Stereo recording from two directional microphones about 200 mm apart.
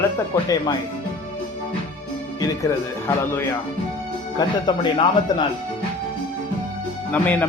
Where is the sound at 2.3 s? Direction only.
15° left (ahead or behind).